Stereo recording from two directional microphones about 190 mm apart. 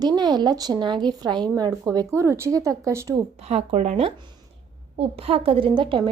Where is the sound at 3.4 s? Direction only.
35° right (ahead or behind).